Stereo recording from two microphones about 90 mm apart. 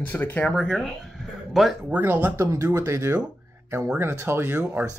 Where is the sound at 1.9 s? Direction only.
15° right (ahead or behind).